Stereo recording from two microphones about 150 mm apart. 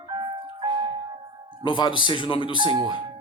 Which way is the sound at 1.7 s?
30° left (ahead or behind).